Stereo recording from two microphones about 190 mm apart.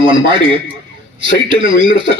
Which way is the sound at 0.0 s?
25° right (ahead or behind).